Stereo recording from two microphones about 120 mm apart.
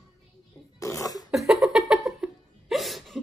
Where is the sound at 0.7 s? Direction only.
25° left (ahead or behind).